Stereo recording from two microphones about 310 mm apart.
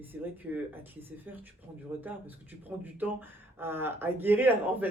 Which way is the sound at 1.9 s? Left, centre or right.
Centre.